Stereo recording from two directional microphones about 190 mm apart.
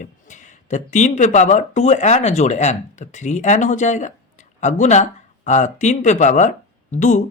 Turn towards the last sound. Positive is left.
turn(degrees=40)  # may be behind; listen again after turning